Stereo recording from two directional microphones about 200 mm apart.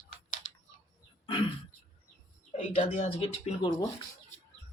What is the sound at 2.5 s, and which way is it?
Speech, 35° left (ahead or behind).